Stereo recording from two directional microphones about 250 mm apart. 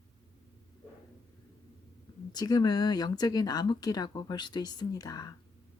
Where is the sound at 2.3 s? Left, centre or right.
Centre.